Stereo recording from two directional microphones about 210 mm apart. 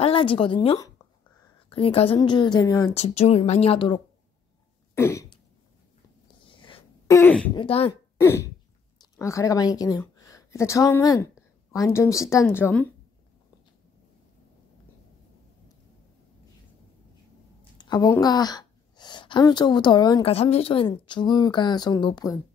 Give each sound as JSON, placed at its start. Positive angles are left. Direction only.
{"t": 0.0, "sound": "a woman's voice", "side_deg": 25}
{"t": 2.9, "sound": "a woman's voice", "side_deg": 30}
{"t": 4.9, "sound": "cough", "side_deg": 15}
{"t": 6.4, "sound": "a sound", "side_deg": 25}
{"t": 7.2, "sound": "speech", "side_deg": 10}
{"t": 7.5, "sound": "a woman's voice", "side_deg": 25}
{"t": 8.2, "sound": "throat clearing", "side_deg": 10}
{"t": 8.9, "sound": "speech", "side_deg": 15}
{"t": 17.7, "sound": "a woman's voice", "side_deg": 20}